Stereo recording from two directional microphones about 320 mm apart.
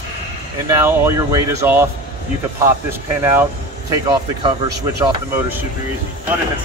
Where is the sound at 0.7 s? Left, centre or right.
Centre.